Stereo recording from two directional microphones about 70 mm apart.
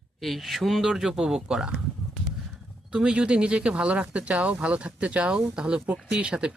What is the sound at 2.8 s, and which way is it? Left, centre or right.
Speech, centre.